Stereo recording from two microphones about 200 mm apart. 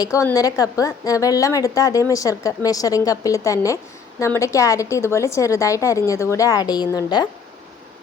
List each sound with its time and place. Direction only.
0.0 s a woman's voice: 15° left (ahead or behind)